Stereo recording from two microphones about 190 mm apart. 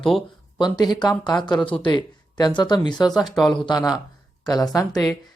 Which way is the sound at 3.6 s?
20° left (ahead or behind).